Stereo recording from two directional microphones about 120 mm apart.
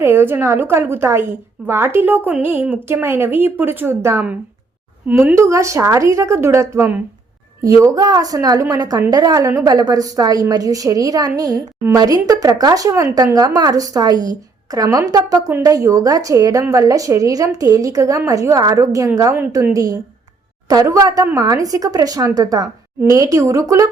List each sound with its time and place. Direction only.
0.0 s a woman's voice: 20° right (ahead or behind)